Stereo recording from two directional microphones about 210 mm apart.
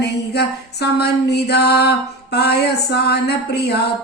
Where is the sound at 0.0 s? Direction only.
50° left (ahead or behind).